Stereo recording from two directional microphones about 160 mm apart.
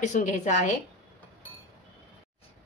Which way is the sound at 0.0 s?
50° left (ahead or behind).